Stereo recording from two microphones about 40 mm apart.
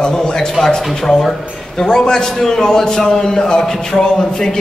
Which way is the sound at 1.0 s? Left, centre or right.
Centre.